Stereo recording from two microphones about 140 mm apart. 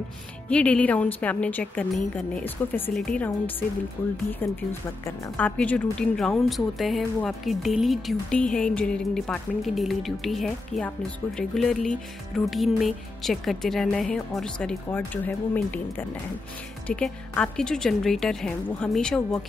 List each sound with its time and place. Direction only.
0.5 s a woman's voice: 10° left (ahead or behind)
16.8 s speech: 10° left (ahead or behind)